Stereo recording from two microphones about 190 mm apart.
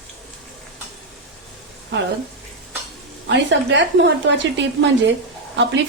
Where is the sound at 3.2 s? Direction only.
70° right (ahead or behind).